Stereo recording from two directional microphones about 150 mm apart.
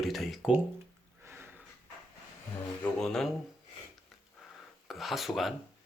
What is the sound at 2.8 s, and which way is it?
Speech, 5° left (ahead or behind).